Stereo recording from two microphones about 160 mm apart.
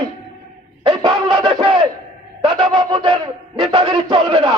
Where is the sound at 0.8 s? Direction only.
30° right (ahead or behind).